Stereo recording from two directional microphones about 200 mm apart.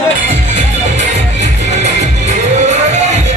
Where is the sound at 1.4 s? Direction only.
35° right (ahead or behind).